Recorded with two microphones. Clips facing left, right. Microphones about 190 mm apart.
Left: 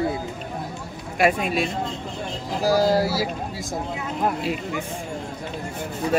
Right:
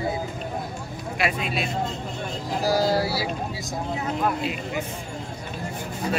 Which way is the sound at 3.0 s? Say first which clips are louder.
Left 3 dB; 45° left (ahead or behind).